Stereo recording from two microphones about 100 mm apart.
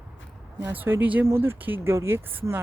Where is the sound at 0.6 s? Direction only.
20° right (ahead or behind).